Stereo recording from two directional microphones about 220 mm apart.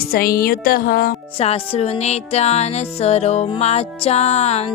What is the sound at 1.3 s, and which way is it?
Music, 25° left (ahead or behind).